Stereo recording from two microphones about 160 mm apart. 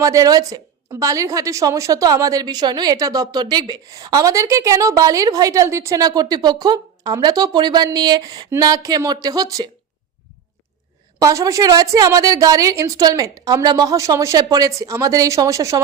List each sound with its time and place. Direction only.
0.0 s a woman's voice: 20° right (ahead or behind)
11.2 s a woman's voice: 20° right (ahead or behind)